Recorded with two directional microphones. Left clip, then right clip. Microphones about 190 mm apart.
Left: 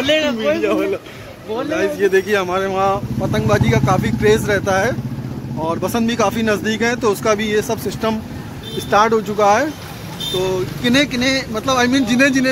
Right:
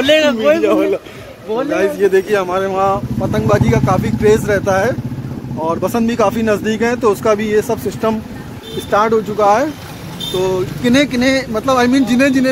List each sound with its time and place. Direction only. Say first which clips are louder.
0.0 s a man's voice: right 5 dB; 60° right (ahead or behind)
0.6 s speech: right 4 dB; 15° right (ahead or behind)
8.9 s speech: right 1 dB; 15° left (ahead or behind)
9.4 s speech: right 2 dB; 5° right (ahead or behind)
10.8 s speech: right 2 dB; 15° right (ahead or behind)